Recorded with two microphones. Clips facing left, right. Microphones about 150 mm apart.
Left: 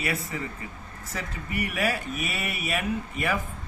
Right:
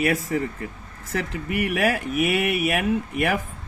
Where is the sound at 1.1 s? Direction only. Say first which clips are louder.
Right 6 dB; 65° right (ahead or behind).